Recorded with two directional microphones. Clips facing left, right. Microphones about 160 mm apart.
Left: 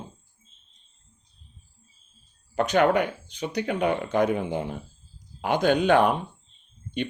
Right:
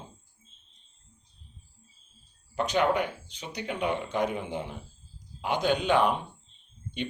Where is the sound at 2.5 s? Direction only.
55° left (ahead or behind).